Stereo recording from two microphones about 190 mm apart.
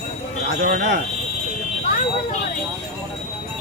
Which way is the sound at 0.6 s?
45° right (ahead or behind).